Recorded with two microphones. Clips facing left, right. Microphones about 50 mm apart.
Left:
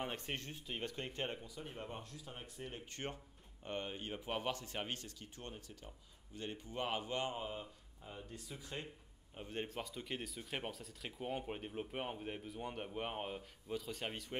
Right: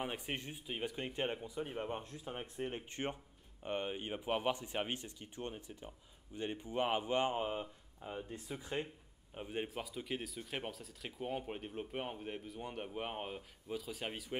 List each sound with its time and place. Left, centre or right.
0.0 s speech: centre
9.3 s speech: centre